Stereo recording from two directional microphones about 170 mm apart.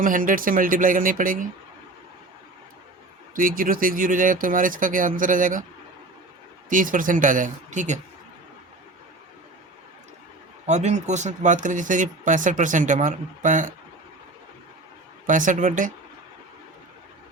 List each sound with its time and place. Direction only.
0.0 s speech: 50° right (ahead or behind)
3.3 s speech: 55° right (ahead or behind)
6.7 s speech: 50° right (ahead or behind)
10.7 s speech: 40° right (ahead or behind)
15.3 s speech: 50° right (ahead or behind)